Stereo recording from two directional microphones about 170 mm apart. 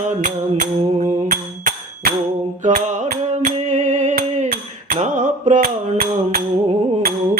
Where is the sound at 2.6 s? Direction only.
45° right (ahead or behind).